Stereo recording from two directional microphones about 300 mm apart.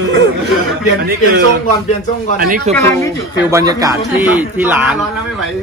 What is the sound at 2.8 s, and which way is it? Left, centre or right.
Speech, centre.